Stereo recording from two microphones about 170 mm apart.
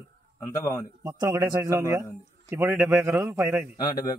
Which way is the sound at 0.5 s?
20° left (ahead or behind).